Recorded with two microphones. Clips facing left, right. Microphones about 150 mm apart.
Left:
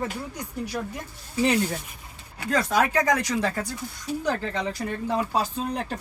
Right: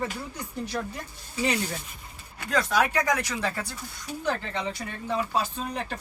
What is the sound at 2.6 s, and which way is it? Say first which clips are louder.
Speech: left 2 dB; 50° left (ahead or behind).